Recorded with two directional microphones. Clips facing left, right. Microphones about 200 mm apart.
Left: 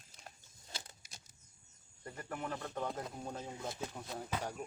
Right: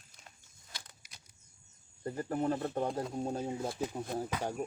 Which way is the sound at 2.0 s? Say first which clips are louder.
Right 10 dB; 35° right (ahead or behind).